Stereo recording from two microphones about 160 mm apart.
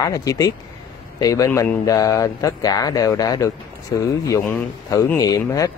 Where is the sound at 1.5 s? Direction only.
10° left (ahead or behind).